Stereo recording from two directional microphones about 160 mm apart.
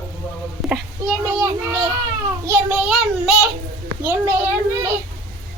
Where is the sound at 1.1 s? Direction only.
20° right (ahead or behind).